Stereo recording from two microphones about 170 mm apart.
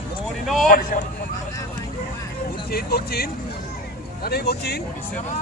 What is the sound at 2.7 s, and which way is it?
Speech, 65° left (ahead or behind).